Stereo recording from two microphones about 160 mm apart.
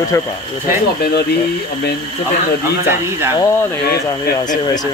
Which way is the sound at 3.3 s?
15° left (ahead or behind).